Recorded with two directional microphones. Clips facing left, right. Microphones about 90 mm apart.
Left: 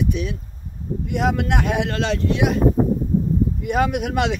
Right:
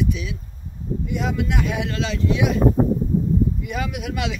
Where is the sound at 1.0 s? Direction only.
65° left (ahead or behind).